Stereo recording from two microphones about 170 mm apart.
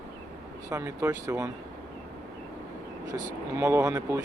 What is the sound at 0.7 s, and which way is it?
Speech, 15° right (ahead or behind).